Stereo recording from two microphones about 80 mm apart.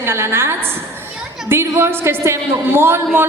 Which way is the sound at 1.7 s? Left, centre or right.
Right.